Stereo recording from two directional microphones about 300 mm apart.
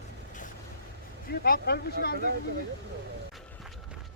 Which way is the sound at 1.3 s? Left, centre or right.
Left.